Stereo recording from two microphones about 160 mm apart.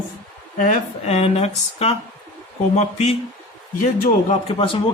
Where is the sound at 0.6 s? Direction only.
45° left (ahead or behind).